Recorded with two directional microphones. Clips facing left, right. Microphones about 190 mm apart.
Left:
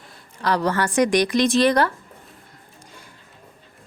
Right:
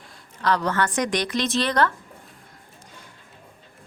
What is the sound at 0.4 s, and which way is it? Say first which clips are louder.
A woman's voice: left 1 dB; 10° left (ahead or behind).